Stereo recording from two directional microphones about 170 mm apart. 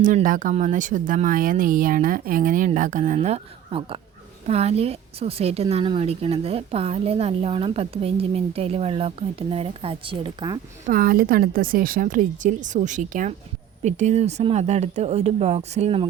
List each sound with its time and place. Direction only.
0.0 s a woman's voice: 50° right (ahead or behind); by 10.6 s 25° right (ahead or behind)
10.8 s a woman's voice: 55° right (ahead or behind); by 16.0 s 35° right (ahead or behind)